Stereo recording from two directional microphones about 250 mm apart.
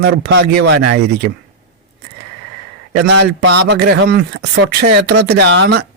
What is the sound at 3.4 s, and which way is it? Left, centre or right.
A man's voice, right.